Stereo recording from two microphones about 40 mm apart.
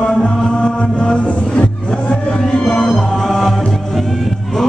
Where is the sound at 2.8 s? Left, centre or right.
Centre.